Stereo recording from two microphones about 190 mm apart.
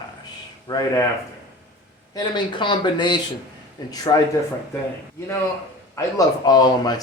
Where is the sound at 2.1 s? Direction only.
20° left (ahead or behind).